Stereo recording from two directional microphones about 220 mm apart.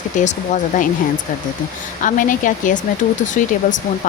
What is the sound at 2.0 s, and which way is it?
Speech, 35° left (ahead or behind).